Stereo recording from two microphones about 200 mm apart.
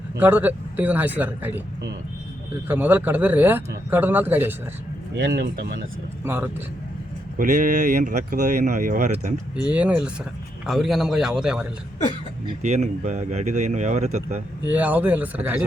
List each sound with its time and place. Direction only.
0.2 s a man's voice: 10° right (ahead or behind)
2.6 s a man's voice: 10° right (ahead or behind)
5.1 s speech: 55° right (ahead or behind)
6.2 s a man's voice: 10° right (ahead or behind)
7.3 s speech: 40° right (ahead or behind)
9.7 s a man's voice: 5° right (ahead or behind)
12.6 s speech: 35° right (ahead or behind)
14.7 s a man's voice: 10° right (ahead or behind)